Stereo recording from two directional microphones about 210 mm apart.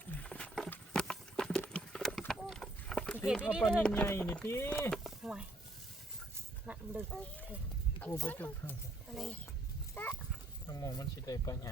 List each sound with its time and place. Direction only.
0.1 s horse: 5° left (ahead or behind)
3.4 s speech: centre (ahead or behind)
6.7 s speech: 5° right (ahead or behind)
7.9 s speech: 10° left (ahead or behind)
9.9 s horse: 10° left (ahead or behind)
10.7 s speech: 15° left (ahead or behind)